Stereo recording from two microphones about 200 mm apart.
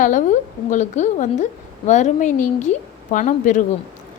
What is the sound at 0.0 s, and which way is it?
A woman's voice, 40° left (ahead or behind).